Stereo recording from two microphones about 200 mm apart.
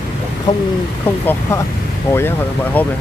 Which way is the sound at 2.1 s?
15° left (ahead or behind).